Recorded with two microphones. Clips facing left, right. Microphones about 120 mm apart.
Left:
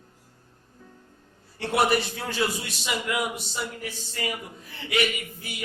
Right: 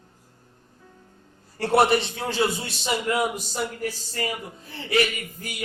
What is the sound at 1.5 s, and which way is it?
A man's voice, 35° right (ahead or behind).